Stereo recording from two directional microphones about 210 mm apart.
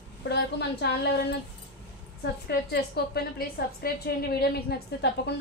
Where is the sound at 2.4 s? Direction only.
50° left (ahead or behind).